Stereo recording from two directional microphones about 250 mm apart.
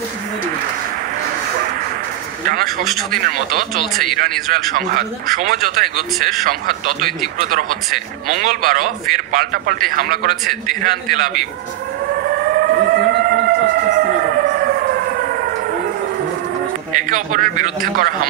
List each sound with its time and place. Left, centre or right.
2.8 s speech: centre
3.1 s speech: right
4.5 s speech: right
8.3 s speech: right
12.5 s siren: right
16.9 s a man's voice: right